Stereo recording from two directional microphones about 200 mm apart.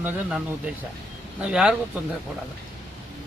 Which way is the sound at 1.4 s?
5° right (ahead or behind).